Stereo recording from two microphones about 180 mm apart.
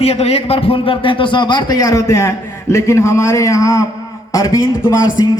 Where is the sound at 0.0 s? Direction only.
35° left (ahead or behind).